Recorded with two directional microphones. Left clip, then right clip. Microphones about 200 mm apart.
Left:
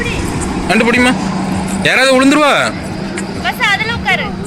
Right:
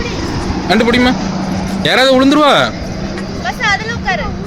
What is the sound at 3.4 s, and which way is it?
Vehicle, 40° right (ahead or behind).